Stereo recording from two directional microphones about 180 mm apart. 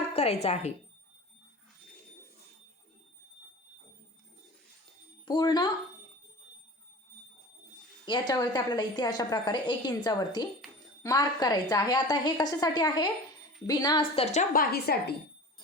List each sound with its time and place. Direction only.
0.1 s speech: 35° left (ahead or behind)
5.2 s a woman's voice: 25° left (ahead or behind)
8.3 s a woman's voice: 20° left (ahead or behind)
14.5 s a woman's voice: 55° left (ahead or behind)